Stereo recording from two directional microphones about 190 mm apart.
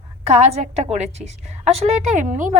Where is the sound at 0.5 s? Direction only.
35° right (ahead or behind).